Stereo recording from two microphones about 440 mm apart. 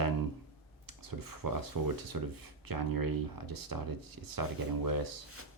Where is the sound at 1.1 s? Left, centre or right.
Right.